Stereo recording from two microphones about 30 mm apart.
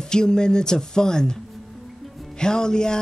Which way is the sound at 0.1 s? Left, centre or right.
Left.